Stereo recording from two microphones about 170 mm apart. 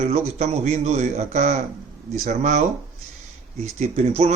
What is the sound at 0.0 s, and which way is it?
Speech, 40° right (ahead or behind).